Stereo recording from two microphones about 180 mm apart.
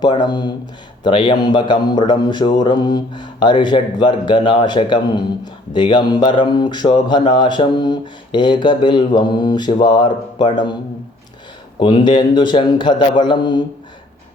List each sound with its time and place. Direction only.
0.0 s a man's voice: 25° left (ahead or behind)
11.8 s a man's voice: 25° left (ahead or behind)